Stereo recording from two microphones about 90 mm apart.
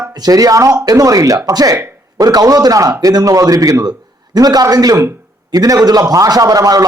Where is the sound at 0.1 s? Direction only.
45° right (ahead or behind).